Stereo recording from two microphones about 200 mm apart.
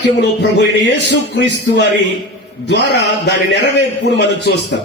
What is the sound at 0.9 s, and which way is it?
A man's voice, 60° left (ahead or behind).